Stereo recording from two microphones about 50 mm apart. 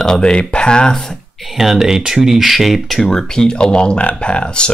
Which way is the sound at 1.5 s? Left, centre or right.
Centre.